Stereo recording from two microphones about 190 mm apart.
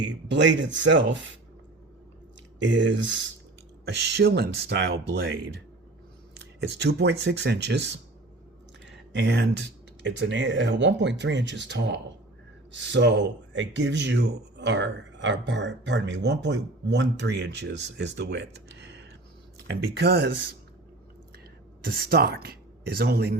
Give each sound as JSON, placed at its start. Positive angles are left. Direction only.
{"t": 0.0, "sound": "speech", "side_deg": -75}
{"t": 2.6, "sound": "speech", "side_deg": -75}
{"t": 3.8, "sound": "speech", "side_deg": -60}
{"t": 21.8, "sound": "speech", "side_deg": -55}